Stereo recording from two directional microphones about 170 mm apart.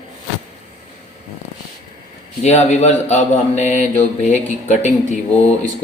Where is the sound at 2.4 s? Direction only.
40° left (ahead or behind).